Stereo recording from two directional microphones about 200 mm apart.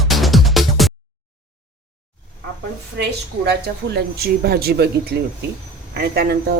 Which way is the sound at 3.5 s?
50° right (ahead or behind).